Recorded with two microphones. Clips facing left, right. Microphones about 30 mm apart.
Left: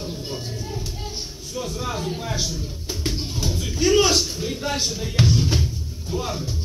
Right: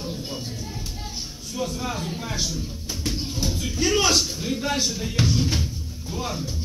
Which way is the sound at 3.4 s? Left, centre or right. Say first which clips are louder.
Left 3 dB; left.